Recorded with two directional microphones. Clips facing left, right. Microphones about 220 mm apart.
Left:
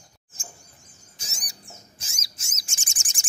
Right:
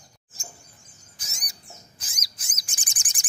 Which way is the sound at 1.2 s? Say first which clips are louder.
Left 2 dB; 30° left (ahead or behind).